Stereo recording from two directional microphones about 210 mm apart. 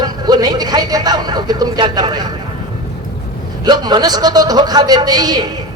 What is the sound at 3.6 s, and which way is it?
Speech, 20° right (ahead or behind).